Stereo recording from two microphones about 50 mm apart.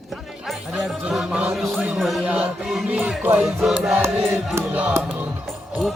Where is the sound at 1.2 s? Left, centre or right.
Right.